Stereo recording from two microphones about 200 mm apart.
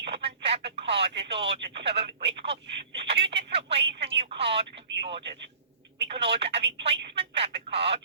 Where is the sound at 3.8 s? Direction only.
55° right (ahead or behind).